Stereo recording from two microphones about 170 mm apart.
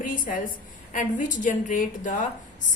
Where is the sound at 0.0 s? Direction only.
50° left (ahead or behind).